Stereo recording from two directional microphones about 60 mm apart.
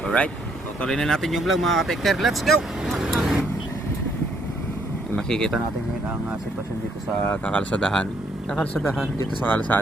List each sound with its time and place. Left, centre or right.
0.9 s speech: centre
2.6 s vehicle: centre
5.1 s speech: centre
7.3 s speech: left
9.5 s speech: left